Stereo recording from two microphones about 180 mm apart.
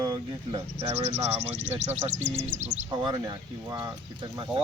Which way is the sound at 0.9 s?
40° right (ahead or behind).